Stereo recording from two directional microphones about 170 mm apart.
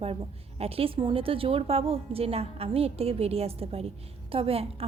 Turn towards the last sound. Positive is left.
turn(degrees=-35)  # may be behind; listen again after turning